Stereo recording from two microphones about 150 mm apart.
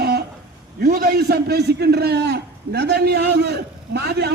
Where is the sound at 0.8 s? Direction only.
90° right.